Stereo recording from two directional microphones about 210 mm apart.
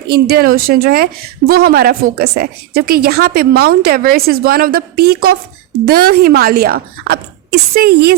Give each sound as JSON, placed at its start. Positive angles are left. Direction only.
{"t": 0.1, "sound": "a woman's voice", "side_deg": -45}